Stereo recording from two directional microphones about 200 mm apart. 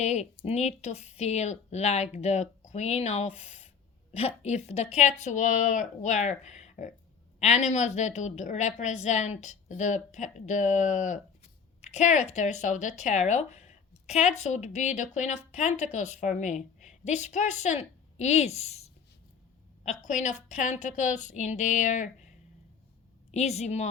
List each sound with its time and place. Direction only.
0.0 s a woman's voice: 35° left (ahead or behind)
23.3 s speech: 35° left (ahead or behind)